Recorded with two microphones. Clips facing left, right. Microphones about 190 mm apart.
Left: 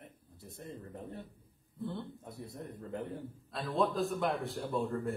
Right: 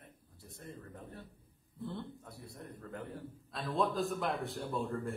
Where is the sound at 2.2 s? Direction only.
20° left (ahead or behind).